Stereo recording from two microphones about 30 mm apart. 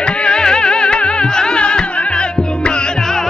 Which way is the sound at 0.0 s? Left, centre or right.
Left.